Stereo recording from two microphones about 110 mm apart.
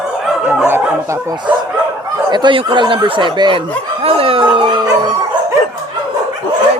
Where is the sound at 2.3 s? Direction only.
45° right (ahead or behind).